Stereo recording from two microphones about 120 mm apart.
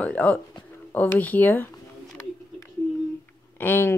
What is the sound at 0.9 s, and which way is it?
Bird, 15° left (ahead or behind).